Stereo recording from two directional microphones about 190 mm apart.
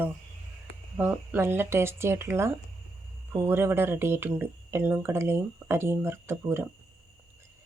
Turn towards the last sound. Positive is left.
turn(degrees=-15)  # may be behind; listen again after turning